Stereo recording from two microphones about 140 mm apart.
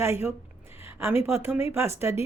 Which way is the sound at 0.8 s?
15° right (ahead or behind).